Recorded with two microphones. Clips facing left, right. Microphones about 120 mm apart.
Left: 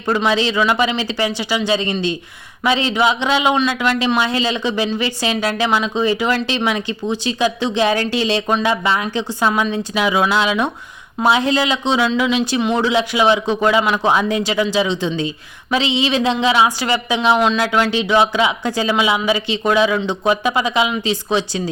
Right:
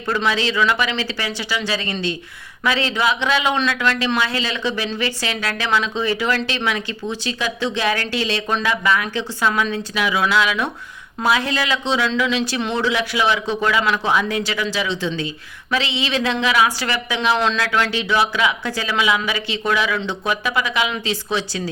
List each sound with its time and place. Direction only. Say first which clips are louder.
0.3 s speech: left 2 dB; 20° left (ahead or behind)